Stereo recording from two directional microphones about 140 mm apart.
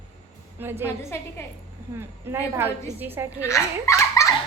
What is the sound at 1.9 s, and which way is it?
A woman's voice, 15° right (ahead or behind).